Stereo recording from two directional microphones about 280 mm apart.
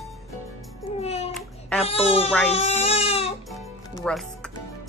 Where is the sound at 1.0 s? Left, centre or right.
Left.